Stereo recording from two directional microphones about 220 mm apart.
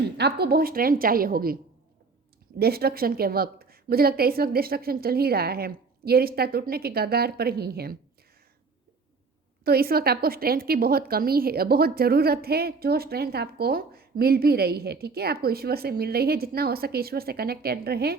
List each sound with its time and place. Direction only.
0.2 s a woman's voice: 45° right (ahead or behind)
2.6 s a woman's voice: 45° right (ahead or behind)
9.6 s a woman's voice: 45° right (ahead or behind)